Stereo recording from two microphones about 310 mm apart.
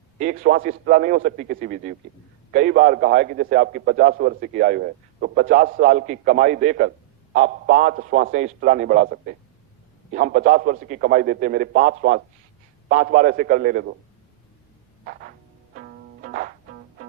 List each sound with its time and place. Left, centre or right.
0.2 s a man's voice: right
15.7 s music: right